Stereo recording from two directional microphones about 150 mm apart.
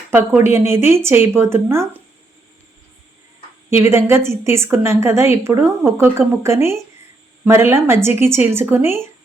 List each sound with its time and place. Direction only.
0.1 s a woman's voice: 15° right (ahead or behind)
3.8 s a woman's voice: 15° right (ahead or behind)